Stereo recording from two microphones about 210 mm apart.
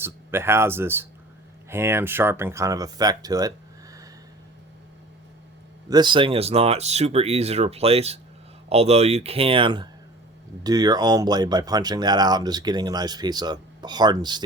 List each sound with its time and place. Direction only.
0.0 s speech: 10° right (ahead or behind)
5.9 s speech: 20° right (ahead or behind)